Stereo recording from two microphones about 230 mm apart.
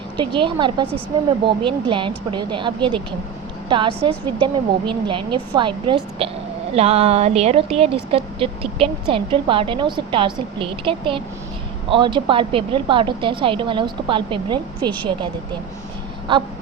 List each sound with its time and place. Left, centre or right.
0.2 s speech: right
16.3 s speech: right